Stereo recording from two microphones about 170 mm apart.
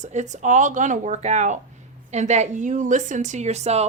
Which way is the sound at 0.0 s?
45° right (ahead or behind).